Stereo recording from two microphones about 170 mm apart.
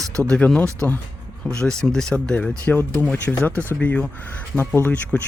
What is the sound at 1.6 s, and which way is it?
Speech, 5° left (ahead or behind).